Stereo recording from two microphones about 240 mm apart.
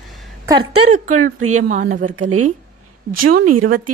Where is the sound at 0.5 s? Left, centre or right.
Right.